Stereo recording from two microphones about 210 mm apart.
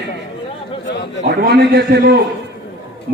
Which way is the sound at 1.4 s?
50° right (ahead or behind).